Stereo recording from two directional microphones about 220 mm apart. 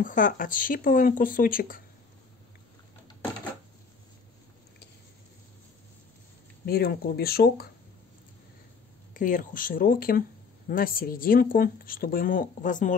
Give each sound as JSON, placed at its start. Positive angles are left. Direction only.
{"t": 0.0, "sound": "speech", "side_deg": 35}
{"t": 6.6, "sound": "speech", "side_deg": 45}
{"t": 9.1, "sound": "speech", "side_deg": 35}